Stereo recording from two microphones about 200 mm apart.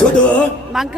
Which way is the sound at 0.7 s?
Centre (ahead or behind).